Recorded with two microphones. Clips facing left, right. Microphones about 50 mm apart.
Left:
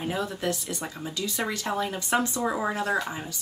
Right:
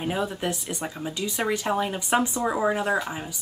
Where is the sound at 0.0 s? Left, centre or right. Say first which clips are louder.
Right 2 dB; centre.